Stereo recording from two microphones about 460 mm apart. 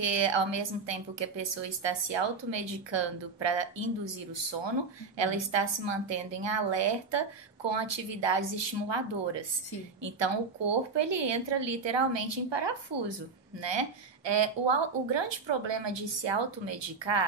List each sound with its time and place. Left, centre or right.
0.0 s a woman's voice: right